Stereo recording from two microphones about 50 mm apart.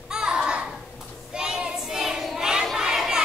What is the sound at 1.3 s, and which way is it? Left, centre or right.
Child singing, centre.